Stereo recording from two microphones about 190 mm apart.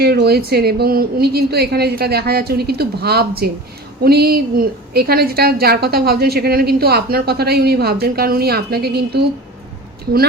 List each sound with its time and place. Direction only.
0.0 s a woman's voice: 55° right (ahead or behind)